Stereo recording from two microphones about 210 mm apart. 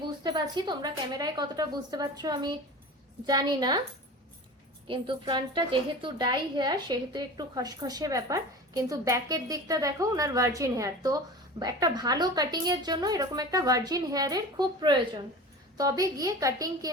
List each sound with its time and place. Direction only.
0.0 s a woman's voice: 20° right (ahead or behind)
4.9 s a woman's voice: 25° right (ahead or behind)